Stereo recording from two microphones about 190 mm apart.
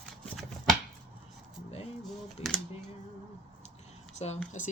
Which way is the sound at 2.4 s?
30° left (ahead or behind).